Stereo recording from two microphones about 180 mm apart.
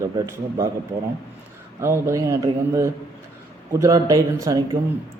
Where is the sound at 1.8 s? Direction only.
15° right (ahead or behind).